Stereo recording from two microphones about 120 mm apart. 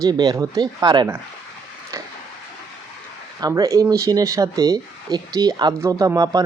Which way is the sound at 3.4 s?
30° right (ahead or behind).